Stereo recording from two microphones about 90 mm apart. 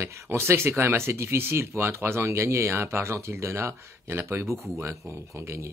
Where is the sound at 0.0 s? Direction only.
30° right (ahead or behind).